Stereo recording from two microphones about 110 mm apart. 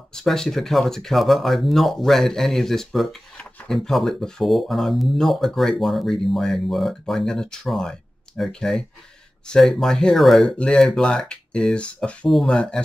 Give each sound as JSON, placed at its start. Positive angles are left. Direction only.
{"t": 0.1, "sound": "speech", "side_deg": 5}